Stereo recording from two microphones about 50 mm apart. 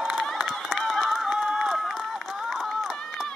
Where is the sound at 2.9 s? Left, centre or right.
Centre.